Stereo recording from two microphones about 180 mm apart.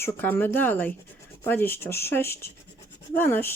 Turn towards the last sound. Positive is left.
turn(degrees=10)  # may be behind; listen again after turning